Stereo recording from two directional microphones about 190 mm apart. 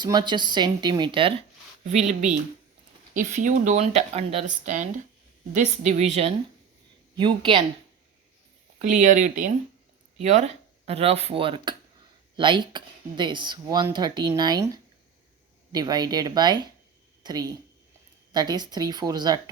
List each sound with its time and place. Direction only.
0.0 s speech: 25° right (ahead or behind)
1.9 s speech: 40° right (ahead or behind)
8.8 s speech: 40° right (ahead or behind); by 14.7 s 20° right (ahead or behind)
15.7 s speech: 20° right (ahead or behind)